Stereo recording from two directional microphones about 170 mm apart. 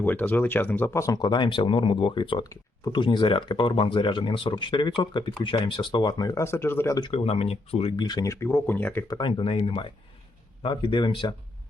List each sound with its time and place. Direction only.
0.0 s speech: 10° left (ahead or behind)
7.1 s speech: 35° left (ahead or behind)